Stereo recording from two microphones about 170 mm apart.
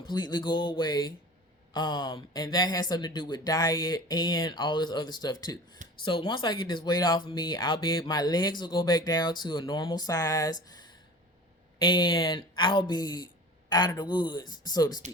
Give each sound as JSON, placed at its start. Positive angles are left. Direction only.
{"t": 0.0, "sound": "speech", "side_deg": 25}